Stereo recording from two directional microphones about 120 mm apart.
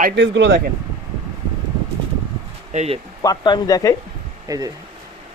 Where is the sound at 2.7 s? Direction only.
60° right (ahead or behind).